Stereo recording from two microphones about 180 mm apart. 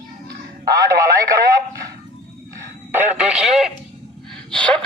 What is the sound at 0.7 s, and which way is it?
Speech, 20° right (ahead or behind).